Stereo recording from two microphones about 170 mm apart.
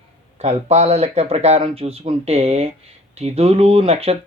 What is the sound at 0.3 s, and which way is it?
Speech, 40° right (ahead or behind).